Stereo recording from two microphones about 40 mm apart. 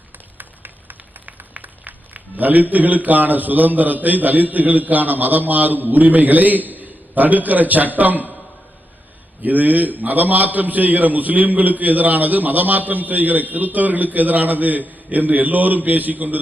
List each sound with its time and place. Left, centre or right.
2.1 s a man's voice: right
9.4 s a man's voice: right